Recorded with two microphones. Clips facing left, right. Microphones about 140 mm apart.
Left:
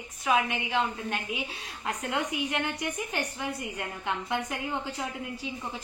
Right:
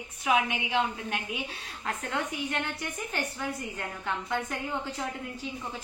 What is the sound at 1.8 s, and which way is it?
A woman's voice, 5° left (ahead or behind).